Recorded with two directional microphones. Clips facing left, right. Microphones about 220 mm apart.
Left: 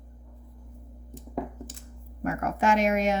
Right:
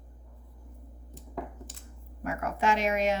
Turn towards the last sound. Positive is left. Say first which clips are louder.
# left 3 dB
turn(degrees=45)  # may be behind; listen again after turning